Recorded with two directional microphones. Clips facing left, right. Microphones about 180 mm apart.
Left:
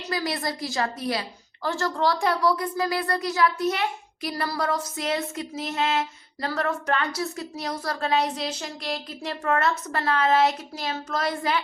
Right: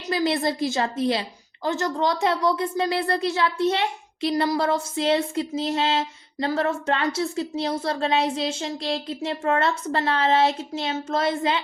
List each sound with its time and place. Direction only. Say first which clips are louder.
0.1 s speech: right 6 dB; 25° right (ahead or behind)